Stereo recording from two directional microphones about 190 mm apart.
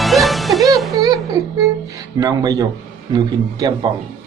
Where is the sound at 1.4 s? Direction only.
20° right (ahead or behind).